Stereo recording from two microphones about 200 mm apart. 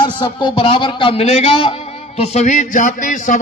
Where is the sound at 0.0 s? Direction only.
25° left (ahead or behind).